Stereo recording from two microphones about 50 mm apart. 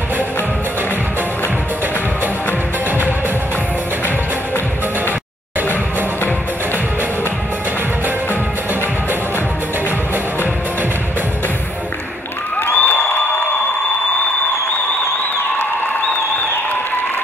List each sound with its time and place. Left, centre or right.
12.7 s applause: left